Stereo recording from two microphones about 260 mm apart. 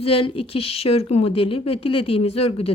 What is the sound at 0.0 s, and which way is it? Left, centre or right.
A woman's voice, left.